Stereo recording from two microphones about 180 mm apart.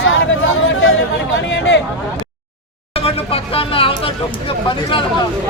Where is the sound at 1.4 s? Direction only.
75° left (ahead or behind).